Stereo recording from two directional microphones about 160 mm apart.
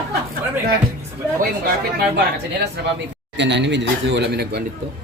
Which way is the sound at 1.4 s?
70° right (ahead or behind).